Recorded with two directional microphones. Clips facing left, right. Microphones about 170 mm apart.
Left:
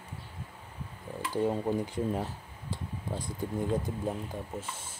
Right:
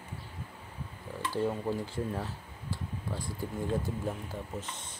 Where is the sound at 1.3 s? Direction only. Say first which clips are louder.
Left 3 dB; 20° left (ahead or behind).